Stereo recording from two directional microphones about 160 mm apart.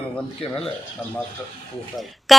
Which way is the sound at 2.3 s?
Centre (ahead or behind).